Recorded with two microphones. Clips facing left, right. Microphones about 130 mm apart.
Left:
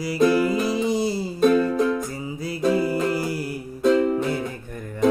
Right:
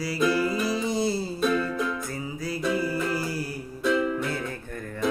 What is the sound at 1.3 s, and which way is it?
Music, 40° left (ahead or behind).